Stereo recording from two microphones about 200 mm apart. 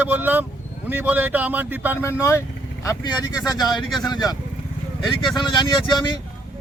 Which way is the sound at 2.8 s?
20° left (ahead or behind).